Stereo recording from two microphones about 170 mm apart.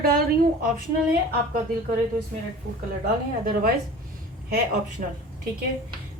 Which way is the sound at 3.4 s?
55° right (ahead or behind).